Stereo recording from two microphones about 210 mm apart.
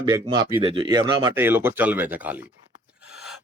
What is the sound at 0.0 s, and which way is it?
Speech, 20° right (ahead or behind).